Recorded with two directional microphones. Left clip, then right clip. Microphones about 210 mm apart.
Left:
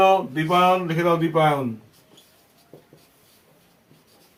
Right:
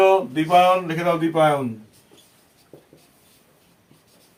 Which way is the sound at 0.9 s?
20° right (ahead or behind).